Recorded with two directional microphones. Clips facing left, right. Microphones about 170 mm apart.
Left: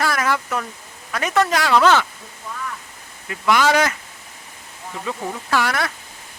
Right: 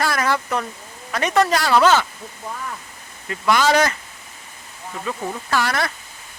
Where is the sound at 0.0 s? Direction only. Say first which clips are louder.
Even; 5° left (ahead or behind).